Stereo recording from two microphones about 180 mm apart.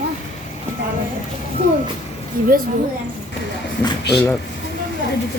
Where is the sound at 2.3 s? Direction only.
50° right (ahead or behind).